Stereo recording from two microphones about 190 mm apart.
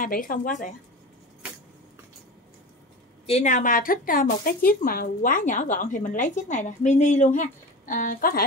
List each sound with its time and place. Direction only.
0.0 s speech: 45° left (ahead or behind)
3.3 s speech: 35° left (ahead or behind)